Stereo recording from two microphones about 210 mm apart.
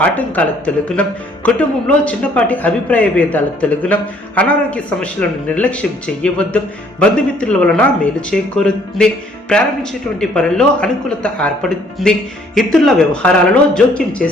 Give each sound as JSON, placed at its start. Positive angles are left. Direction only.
{"t": 0.0, "sound": "a man's voice", "side_deg": 5}
{"t": 10.2, "sound": "speech", "side_deg": 5}